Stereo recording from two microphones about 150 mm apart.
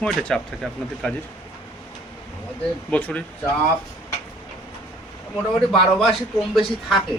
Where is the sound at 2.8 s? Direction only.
10° left (ahead or behind).